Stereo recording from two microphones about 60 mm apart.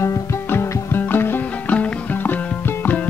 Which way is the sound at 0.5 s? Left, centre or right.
Left.